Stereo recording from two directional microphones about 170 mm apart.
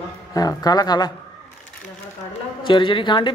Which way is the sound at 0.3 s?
20° left (ahead or behind).